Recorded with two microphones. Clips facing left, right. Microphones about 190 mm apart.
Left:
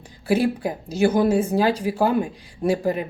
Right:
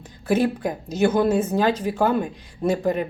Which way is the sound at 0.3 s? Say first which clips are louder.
Even; 10° left (ahead or behind).